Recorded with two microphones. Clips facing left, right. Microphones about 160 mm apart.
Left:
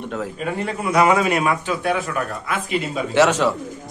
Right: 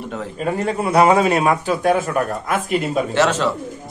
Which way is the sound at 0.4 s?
40° right (ahead or behind).